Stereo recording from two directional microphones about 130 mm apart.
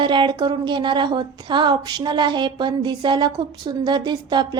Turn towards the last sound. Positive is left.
turn(degrees=-35)  # may be behind; listen again after turning